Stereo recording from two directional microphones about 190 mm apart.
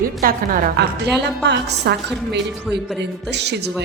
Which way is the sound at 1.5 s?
60° right (ahead or behind).